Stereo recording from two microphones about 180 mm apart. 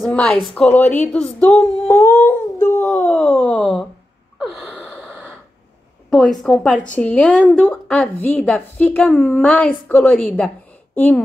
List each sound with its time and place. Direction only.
0.0 s a woman's voice: 5° left (ahead or behind)
0.8 s a woman's voice: 40° left (ahead or behind)
1.1 s a sound: 5° left (ahead or behind)
4.4 s gasp: centre (ahead or behind)
6.0 s a sound: 5° left (ahead or behind)
6.4 s a woman's voice: centre (ahead or behind)